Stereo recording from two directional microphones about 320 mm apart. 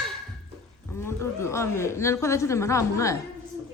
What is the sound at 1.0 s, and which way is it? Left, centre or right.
A woman's voice, centre.